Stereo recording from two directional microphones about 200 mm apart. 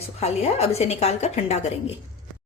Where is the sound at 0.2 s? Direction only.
30° left (ahead or behind).